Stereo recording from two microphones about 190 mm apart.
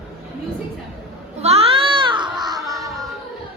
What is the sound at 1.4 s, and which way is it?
Baby cry, 30° right (ahead or behind).